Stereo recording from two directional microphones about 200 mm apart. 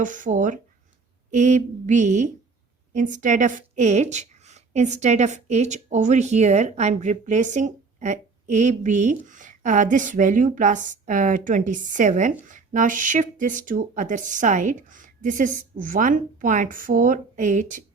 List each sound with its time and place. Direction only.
0.0 s a woman's voice: 40° right (ahead or behind)